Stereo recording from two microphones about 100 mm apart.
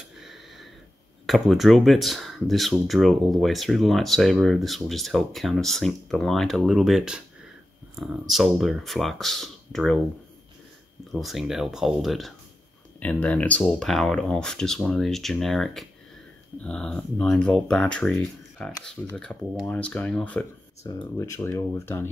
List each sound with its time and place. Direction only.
0.2 s a sound: 5° right (ahead or behind)
1.2 s speech: centre (ahead or behind)
11.1 s speech: centre (ahead or behind)
13.0 s speech: 15° left (ahead or behind)
13.7 s speech: 5° left (ahead or behind)
19.3 s speech: 15° left (ahead or behind)
21.2 s speech: 30° left (ahead or behind)